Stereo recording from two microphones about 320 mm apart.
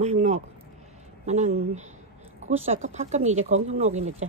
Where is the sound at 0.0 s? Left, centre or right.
Right.